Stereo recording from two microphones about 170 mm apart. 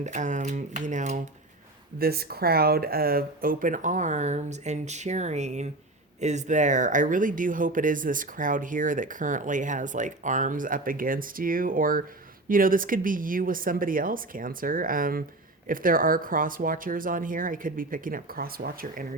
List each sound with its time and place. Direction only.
0.0 s speech: 45° right (ahead or behind)
2.0 s speech: 65° right (ahead or behind)